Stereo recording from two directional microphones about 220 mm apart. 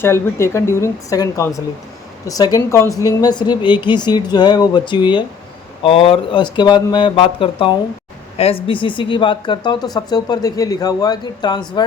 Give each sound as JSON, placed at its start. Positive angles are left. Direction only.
{"t": 0.0, "sound": "a woman's voice", "side_deg": 10}